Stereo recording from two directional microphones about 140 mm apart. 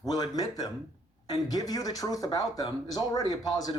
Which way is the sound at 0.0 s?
30° left (ahead or behind).